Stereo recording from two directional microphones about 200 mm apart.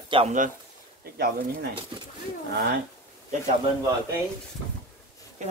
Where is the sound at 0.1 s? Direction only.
30° right (ahead or behind).